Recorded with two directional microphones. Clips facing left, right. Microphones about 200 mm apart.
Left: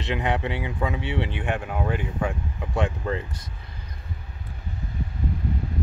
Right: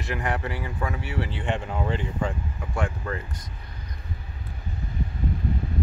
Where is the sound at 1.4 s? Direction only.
10° left (ahead or behind).